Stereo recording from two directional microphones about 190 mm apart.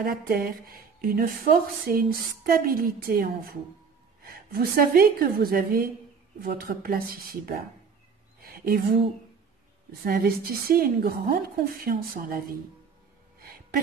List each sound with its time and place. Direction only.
0.0 s speech: 50° right (ahead or behind)
8.4 s a sound: 50° right (ahead or behind)
10.0 s speech: 50° right (ahead or behind)